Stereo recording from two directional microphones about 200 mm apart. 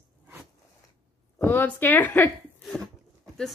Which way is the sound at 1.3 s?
10° left (ahead or behind).